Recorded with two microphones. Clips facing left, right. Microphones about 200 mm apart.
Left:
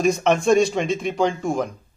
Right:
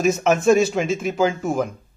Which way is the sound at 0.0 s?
5° right (ahead or behind).